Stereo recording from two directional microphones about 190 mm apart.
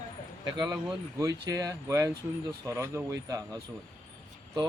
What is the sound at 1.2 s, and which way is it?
Speech, 20° right (ahead or behind).